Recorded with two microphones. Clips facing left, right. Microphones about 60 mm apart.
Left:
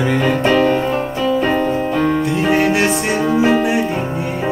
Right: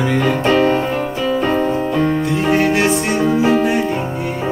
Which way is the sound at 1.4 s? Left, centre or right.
Centre.